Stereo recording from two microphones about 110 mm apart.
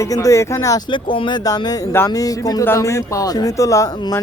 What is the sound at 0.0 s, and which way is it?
Speech, 30° left (ahead or behind).